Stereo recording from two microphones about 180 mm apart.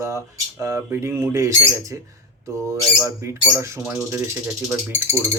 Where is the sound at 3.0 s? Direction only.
15° right (ahead or behind).